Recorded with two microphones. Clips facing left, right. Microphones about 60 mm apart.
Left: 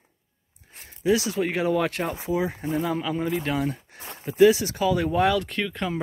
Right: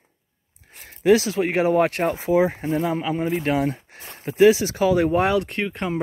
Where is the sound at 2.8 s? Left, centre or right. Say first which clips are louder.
Right 3 dB; right.